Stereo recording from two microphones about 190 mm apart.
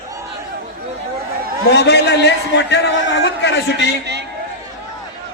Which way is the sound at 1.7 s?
60° left (ahead or behind).